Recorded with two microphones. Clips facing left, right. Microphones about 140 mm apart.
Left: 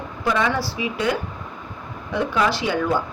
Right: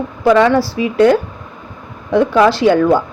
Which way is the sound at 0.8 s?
65° right (ahead or behind).